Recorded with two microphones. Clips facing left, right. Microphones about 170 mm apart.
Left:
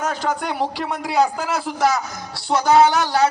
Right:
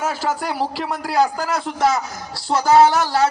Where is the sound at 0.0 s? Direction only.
5° right (ahead or behind).